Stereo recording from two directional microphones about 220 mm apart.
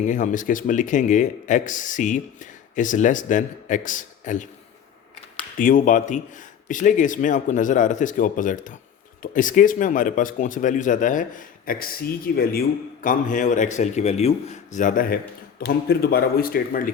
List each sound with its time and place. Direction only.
0.0 s speech: 35° left (ahead or behind)
5.5 s speech: 40° left (ahead or behind)